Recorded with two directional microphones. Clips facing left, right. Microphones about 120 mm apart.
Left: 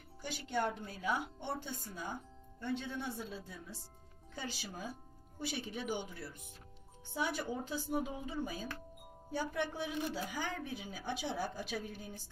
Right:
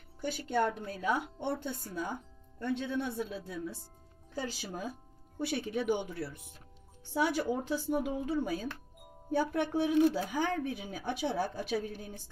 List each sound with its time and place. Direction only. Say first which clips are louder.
0.2 s speech: right 6 dB; 55° right (ahead or behind)
4.4 s speech: right 6 dB; 40° right (ahead or behind)
5.4 s speech: right 7 dB; 55° right (ahead or behind)
7.1 s a woman's voice: right 7 dB; 75° right (ahead or behind)
9.3 s speech: right 7 dB; 55° right (ahead or behind)